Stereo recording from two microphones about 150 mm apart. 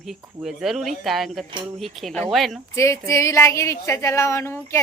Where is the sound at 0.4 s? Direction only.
Centre (ahead or behind).